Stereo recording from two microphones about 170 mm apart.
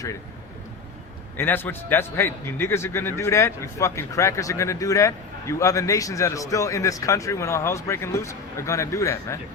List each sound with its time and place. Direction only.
1.4 s a man's voice: 10° left (ahead or behind)